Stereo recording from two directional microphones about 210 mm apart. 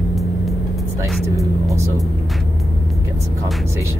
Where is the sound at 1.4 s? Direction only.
15° right (ahead or behind).